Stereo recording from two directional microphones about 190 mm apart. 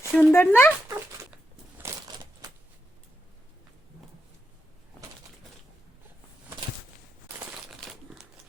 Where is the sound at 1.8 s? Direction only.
20° right (ahead or behind).